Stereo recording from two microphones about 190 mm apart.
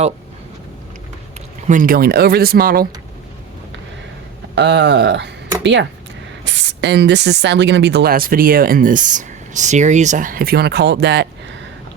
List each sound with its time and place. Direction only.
1.6 s speech: 45° right (ahead or behind)
4.5 s speech: 65° right (ahead or behind)